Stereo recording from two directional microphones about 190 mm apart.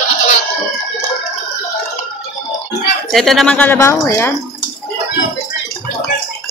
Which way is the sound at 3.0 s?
Centre (ahead or behind).